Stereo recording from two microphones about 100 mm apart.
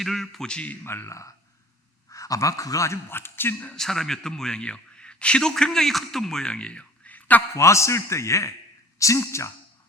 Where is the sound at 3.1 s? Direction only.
20° left (ahead or behind).